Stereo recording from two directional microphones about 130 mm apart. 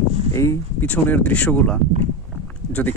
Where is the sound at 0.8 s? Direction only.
10° left (ahead or behind).